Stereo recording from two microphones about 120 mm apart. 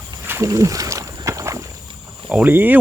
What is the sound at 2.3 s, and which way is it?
Speech, 10° right (ahead or behind).